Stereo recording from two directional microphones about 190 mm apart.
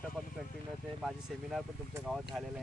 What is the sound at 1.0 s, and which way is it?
Speech, centre (ahead or behind).